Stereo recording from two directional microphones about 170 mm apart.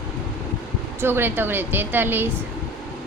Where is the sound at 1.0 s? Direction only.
15° right (ahead or behind).